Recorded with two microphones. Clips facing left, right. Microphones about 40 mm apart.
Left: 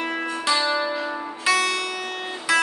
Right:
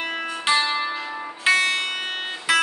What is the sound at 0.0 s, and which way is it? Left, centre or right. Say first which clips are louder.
Music: left 1 dB; right.